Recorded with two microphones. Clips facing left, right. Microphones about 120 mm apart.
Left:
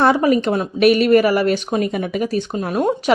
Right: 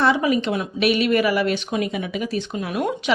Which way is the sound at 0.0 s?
45° left (ahead or behind).